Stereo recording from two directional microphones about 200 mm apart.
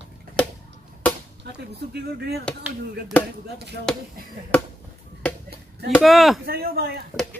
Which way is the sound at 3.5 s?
55° right (ahead or behind).